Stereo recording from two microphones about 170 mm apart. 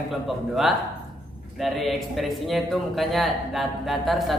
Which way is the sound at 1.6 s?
Centre (ahead or behind).